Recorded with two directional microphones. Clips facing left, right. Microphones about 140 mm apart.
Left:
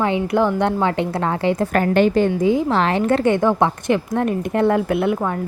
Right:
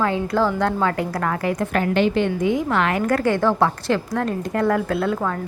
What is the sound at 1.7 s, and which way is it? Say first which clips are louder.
A woman's voice: left 3 dB; 45° left (ahead or behind).